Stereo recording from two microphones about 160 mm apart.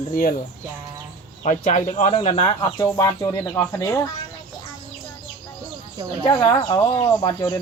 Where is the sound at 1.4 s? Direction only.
45° left (ahead or behind).